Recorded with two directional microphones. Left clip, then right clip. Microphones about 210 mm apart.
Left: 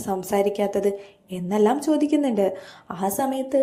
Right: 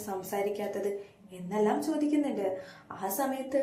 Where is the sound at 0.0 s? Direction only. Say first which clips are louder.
Left 10 dB; 45° left (ahead or behind).